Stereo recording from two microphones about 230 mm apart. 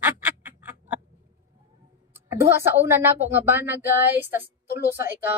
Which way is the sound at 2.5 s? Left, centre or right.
Centre.